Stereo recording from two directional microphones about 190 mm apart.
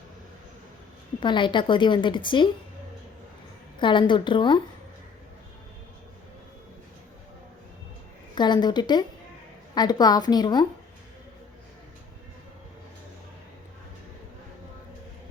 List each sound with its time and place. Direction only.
1.2 s a woman's voice: 25° left (ahead or behind)
3.8 s a woman's voice: 25° left (ahead or behind)
8.4 s a woman's voice: 25° left (ahead or behind)